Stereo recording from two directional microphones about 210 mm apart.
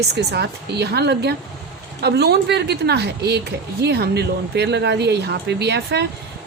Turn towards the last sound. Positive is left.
turn(degrees=-50)  # may be behind; listen again after turning